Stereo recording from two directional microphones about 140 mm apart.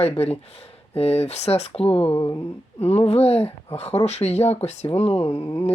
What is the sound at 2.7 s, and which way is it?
Speech, 50° left (ahead or behind).